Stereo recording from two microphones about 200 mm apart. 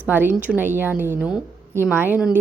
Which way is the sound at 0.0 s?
10° right (ahead or behind).